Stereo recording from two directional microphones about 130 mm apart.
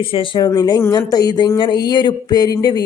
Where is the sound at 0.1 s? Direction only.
35° left (ahead or behind).